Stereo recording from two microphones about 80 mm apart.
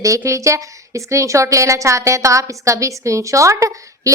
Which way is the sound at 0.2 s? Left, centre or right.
Right.